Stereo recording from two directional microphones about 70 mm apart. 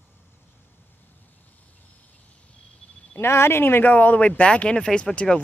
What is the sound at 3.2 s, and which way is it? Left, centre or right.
Speech, left.